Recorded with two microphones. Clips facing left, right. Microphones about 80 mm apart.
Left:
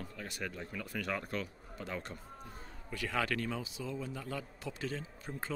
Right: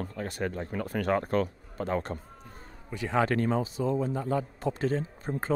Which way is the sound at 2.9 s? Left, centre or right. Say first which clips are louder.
Right 8 dB; right.